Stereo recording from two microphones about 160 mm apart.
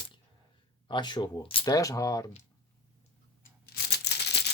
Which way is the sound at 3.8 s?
90° left.